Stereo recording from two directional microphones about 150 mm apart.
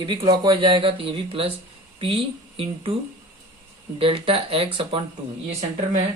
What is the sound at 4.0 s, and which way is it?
Speech, 40° right (ahead or behind).